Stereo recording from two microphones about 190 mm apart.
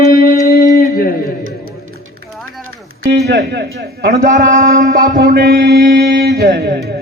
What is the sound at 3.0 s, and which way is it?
A man's voice, 60° right (ahead or behind).